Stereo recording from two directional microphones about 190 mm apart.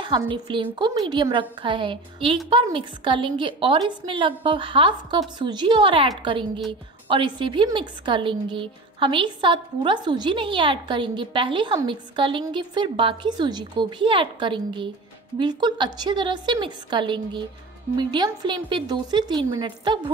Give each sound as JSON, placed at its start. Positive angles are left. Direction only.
{"t": 0.0, "sound": "a woman's voice", "side_deg": -25}